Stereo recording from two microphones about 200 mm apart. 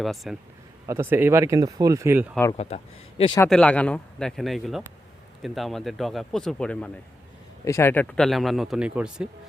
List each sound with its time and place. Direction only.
0.0 s a man's voice: centre (ahead or behind)
0.9 s speech: 10° right (ahead or behind)
2.6 s speech: 30° left (ahead or behind)
3.5 s a man's voice: 5° left (ahead or behind)